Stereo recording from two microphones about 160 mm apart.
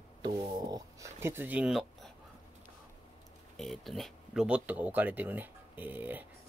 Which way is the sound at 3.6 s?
Centre (ahead or behind).